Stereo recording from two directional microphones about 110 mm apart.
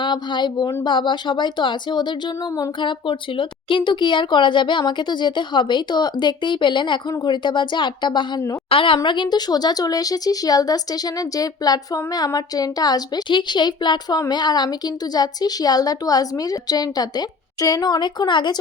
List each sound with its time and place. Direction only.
0.0 s speech: 45° left (ahead or behind)